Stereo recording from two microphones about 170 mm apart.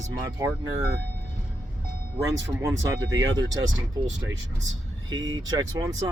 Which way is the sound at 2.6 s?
20° right (ahead or behind).